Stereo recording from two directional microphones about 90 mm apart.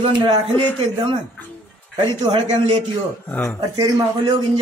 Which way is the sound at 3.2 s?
20° left (ahead or behind).